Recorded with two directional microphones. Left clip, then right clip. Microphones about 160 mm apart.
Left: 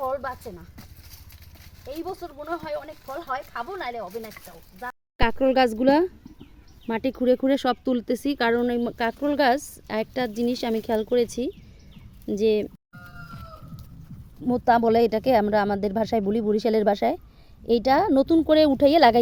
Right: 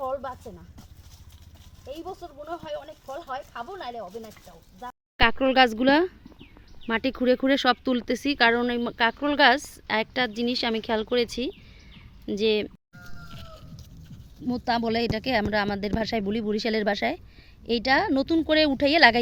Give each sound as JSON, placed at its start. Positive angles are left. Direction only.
{"t": 0.0, "sound": "a sound", "side_deg": 0}
{"t": 1.9, "sound": "speech", "side_deg": 0}
{"t": 14.4, "sound": "speech", "side_deg": 20}